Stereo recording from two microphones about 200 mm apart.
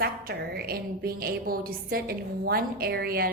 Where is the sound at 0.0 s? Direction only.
50° right (ahead or behind).